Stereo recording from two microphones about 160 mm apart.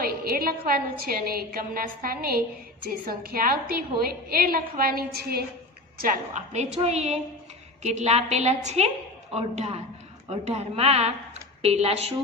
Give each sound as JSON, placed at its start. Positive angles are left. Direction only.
{"t": 0.0, "sound": "a woman's voice", "side_deg": -70}
{"t": 6.0, "sound": "a woman's voice", "side_deg": -65}
{"t": 6.5, "sound": "a woman's voice", "side_deg": -45}